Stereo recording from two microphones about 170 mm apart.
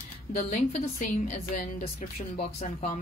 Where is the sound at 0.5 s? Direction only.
50° left (ahead or behind).